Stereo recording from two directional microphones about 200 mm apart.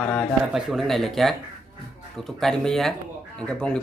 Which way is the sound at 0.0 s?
5° left (ahead or behind).